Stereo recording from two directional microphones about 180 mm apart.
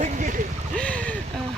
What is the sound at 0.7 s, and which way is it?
Speech, 5° left (ahead or behind).